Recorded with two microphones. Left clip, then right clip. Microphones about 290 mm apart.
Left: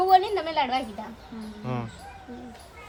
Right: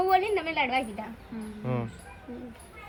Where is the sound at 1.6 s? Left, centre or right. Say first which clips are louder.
Even; centre.